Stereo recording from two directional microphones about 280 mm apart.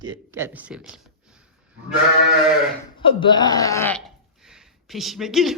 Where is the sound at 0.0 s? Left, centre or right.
Centre.